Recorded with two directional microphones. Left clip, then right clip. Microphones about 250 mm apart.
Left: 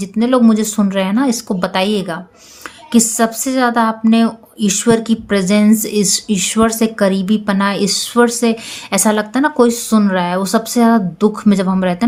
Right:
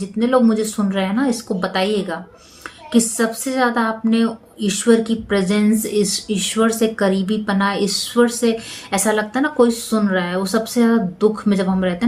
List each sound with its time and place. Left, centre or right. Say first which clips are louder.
0.0 s a woman's voice: left 3 dB; left